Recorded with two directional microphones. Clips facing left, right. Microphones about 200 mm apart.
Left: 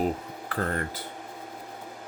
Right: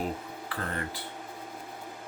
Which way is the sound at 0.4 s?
45° left (ahead or behind).